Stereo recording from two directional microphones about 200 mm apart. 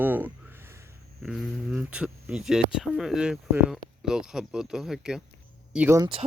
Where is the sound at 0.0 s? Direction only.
10° right (ahead or behind).